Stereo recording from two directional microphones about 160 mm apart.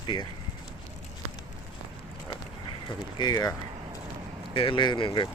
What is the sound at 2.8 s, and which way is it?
Speech, 25° left (ahead or behind).